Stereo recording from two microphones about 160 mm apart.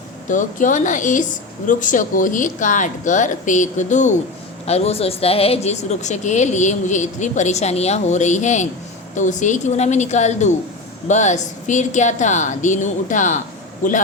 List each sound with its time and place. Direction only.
0.3 s a woman's voice: 50° left (ahead or behind)